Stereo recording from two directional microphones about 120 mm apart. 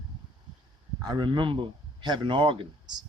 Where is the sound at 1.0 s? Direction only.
35° right (ahead or behind).